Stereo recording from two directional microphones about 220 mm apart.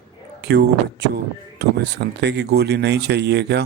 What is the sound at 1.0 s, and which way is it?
Speech, 50° right (ahead or behind).